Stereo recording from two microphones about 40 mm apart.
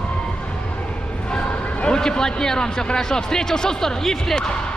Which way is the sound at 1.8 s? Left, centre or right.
Centre.